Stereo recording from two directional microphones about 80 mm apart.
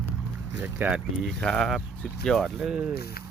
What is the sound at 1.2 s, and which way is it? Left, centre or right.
Speech, centre.